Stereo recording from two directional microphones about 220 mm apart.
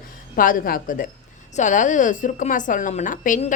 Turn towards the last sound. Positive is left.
turn(degrees=35)  # may be behind; listen again after turning